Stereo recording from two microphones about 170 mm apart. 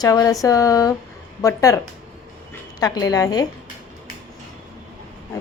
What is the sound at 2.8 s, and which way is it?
Speech, 20° left (ahead or behind).